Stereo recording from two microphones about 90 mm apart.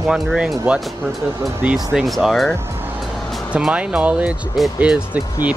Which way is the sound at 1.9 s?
Centre (ahead or behind).